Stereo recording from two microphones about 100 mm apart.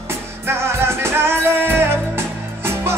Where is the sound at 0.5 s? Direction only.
25° right (ahead or behind).